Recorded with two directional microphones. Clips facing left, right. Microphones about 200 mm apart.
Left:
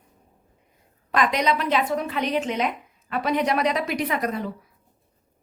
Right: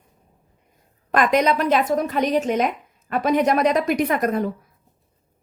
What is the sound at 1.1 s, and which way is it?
Speech, 50° right (ahead or behind).